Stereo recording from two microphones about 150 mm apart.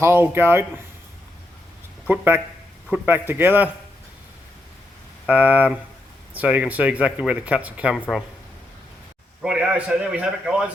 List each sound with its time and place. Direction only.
0.0 s speech: 15° right (ahead or behind)
2.0 s speech: 10° right (ahead or behind)
5.2 s speech: 10° right (ahead or behind)
9.4 s a man's voice: 5° right (ahead or behind)